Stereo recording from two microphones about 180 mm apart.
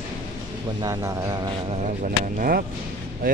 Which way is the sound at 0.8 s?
20° right (ahead or behind).